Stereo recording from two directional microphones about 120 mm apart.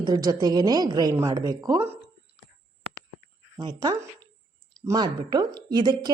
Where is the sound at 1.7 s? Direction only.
20° right (ahead or behind).